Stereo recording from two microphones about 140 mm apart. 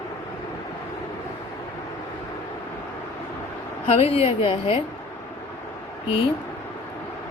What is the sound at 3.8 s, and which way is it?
Speech, 45° left (ahead or behind).